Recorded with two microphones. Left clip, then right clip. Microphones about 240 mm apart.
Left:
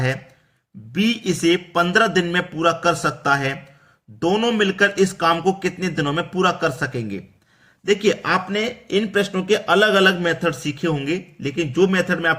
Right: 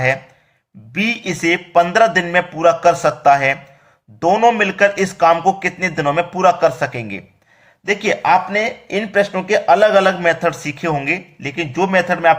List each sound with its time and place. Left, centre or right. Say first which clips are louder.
0.9 s a man's voice: right 2 dB; centre